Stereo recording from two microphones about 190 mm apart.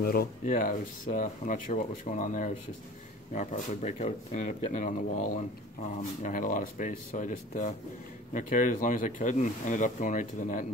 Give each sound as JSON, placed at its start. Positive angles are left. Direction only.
{"t": 0.0, "sound": "speech", "side_deg": 50}